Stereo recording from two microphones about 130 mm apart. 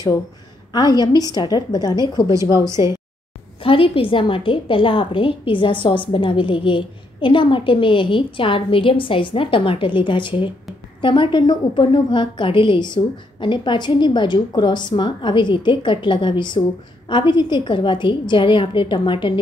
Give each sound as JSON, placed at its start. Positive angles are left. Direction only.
{"t": 0.7, "sound": "a woman's voice", "side_deg": 30}
{"t": 3.6, "sound": "a woman's voice", "side_deg": 45}